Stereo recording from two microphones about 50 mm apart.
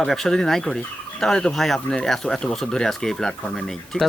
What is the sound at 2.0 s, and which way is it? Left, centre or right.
Speech, centre.